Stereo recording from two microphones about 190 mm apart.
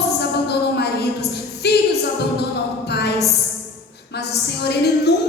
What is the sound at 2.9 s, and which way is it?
Speech, 60° left (ahead or behind).